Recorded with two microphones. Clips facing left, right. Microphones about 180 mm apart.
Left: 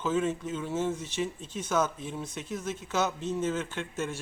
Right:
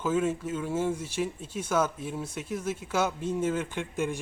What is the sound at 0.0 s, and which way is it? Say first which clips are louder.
Speech: right 1 dB; 10° right (ahead or behind).